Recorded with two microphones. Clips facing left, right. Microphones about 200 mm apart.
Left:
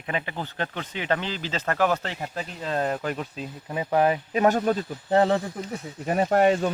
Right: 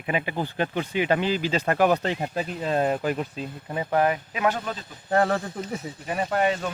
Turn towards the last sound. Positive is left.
turn(degrees=45)  # may be behind; listen again after turning